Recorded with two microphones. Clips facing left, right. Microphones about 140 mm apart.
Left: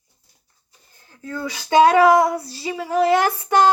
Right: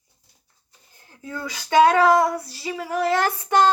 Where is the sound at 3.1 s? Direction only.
10° left (ahead or behind).